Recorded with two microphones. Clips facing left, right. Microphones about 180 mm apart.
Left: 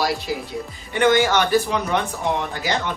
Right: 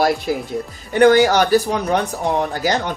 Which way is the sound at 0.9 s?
40° right (ahead or behind).